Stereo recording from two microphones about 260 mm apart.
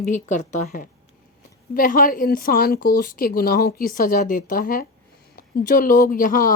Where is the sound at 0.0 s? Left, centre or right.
Left.